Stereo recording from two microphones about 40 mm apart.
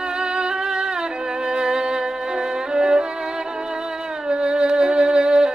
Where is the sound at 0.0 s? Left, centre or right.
Right.